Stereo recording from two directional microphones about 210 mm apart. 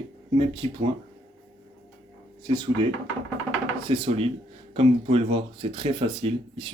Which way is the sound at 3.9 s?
25° right (ahead or behind).